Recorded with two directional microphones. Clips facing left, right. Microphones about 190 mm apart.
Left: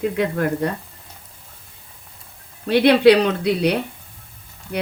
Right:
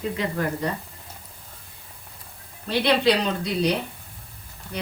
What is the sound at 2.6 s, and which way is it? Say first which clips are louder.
Speech: left 8 dB; 60° left (ahead or behind).